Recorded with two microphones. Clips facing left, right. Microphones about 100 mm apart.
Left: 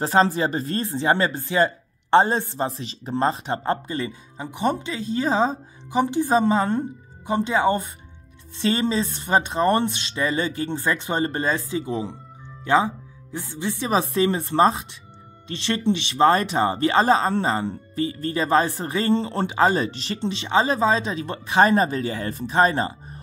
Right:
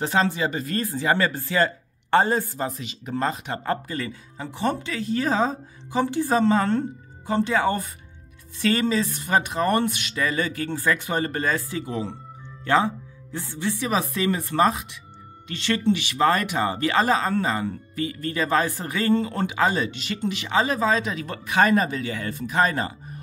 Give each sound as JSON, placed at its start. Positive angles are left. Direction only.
{"t": 0.0, "sound": "speech", "side_deg": 35}